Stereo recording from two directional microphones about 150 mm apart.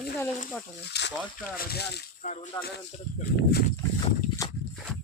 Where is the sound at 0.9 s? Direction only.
90° left.